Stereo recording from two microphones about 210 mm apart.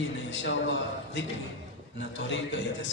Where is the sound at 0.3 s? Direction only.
60° left (ahead or behind).